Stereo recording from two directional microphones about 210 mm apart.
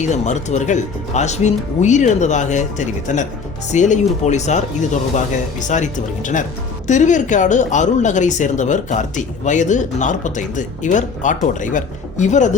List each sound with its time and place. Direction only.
0.0 s speech: 35° left (ahead or behind)